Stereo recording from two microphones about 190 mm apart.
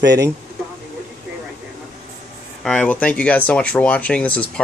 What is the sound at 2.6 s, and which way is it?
Speech, 5° left (ahead or behind).